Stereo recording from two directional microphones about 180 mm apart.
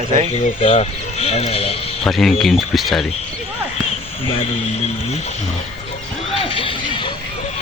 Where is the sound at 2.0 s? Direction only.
Centre (ahead or behind).